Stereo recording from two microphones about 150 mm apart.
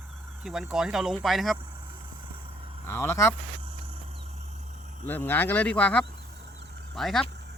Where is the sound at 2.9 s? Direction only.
15° left (ahead or behind).